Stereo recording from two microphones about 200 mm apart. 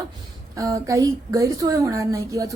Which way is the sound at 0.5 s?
15° right (ahead or behind).